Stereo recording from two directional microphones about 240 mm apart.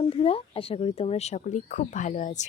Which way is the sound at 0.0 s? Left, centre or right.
Left.